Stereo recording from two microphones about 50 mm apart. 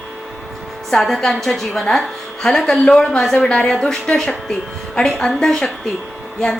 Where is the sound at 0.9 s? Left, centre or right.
Centre.